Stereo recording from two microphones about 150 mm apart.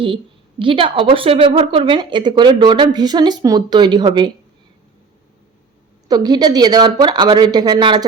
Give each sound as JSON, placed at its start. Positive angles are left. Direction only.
{"t": 0.6, "sound": "a woman's voice", "side_deg": -35}
{"t": 6.1, "sound": "speech", "side_deg": -25}